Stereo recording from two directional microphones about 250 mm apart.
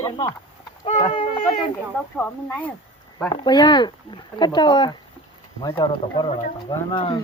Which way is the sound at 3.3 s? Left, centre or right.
Centre.